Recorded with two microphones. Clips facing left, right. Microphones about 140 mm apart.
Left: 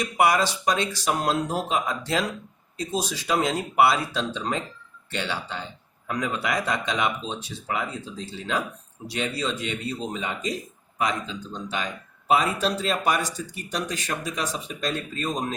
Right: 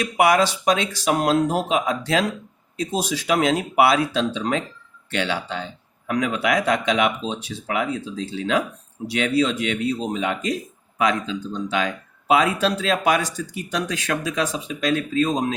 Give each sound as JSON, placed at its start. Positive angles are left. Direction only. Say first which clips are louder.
{"t": 0.0, "sound": "speech", "louder": "right 4 dB", "side_deg": -90}
{"t": 10.9, "sound": "speech", "louder": "right 5 dB", "side_deg": -90}